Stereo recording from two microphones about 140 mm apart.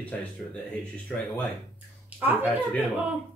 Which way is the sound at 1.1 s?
10° left (ahead or behind).